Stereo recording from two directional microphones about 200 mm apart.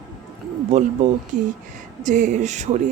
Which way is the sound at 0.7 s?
35° right (ahead or behind).